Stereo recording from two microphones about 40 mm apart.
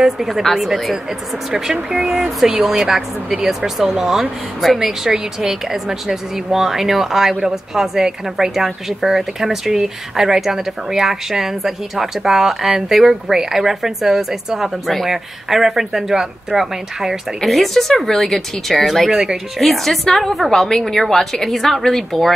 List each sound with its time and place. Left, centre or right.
0.0 s speech: centre
2.0 s speech: centre
17.5 s speech: centre
19.1 s speech: centre
19.6 s a woman's voice: centre